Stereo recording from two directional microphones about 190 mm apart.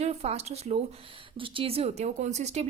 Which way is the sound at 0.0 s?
35° right (ahead or behind).